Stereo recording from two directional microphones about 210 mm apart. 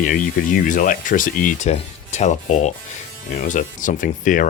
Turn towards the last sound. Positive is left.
turn(degrees=40)  # may be behind; listen again after turning